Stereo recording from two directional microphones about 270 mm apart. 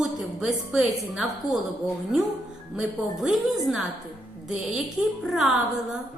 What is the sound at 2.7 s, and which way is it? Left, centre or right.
A woman's voice, centre.